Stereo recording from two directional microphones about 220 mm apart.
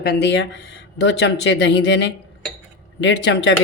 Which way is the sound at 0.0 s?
50° left (ahead or behind).